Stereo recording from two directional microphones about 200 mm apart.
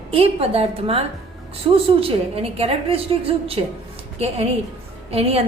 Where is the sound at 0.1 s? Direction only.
30° right (ahead or behind).